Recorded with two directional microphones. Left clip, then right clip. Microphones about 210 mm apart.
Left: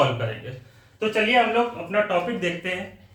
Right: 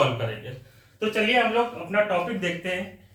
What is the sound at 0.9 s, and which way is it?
Speech, 15° left (ahead or behind).